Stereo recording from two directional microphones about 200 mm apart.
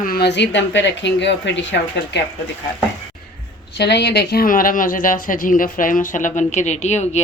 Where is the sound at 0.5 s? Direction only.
65° left (ahead or behind).